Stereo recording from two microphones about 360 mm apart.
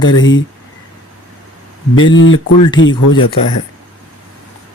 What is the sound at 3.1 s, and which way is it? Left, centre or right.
Speech, centre.